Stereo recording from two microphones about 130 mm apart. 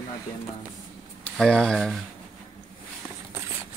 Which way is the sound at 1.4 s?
5° left (ahead or behind).